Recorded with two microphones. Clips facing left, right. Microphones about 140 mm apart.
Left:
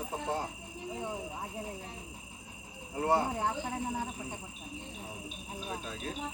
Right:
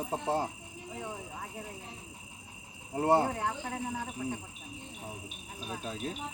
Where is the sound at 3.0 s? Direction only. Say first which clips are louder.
Right 3 dB; 30° right (ahead or behind).